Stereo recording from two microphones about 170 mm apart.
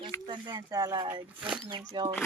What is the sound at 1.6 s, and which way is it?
Speech, 25° right (ahead or behind).